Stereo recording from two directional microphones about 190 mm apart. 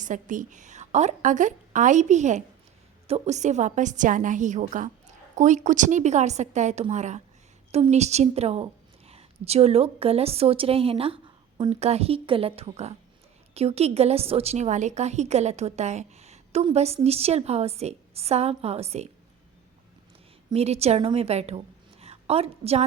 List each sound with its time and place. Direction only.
0.0 s a woman's voice: 40° right (ahead or behind)
20.5 s a woman's voice: 35° right (ahead or behind)